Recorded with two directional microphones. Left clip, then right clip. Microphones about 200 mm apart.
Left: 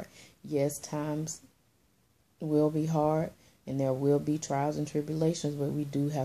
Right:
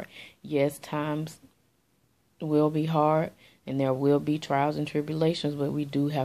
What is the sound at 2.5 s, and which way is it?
Speech, 10° left (ahead or behind).